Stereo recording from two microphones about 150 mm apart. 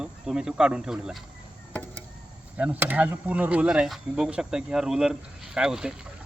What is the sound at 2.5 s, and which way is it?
Speech, 10° right (ahead or behind).